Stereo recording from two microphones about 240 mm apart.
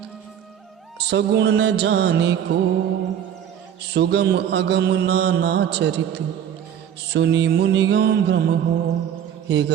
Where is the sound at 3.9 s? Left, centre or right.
Right.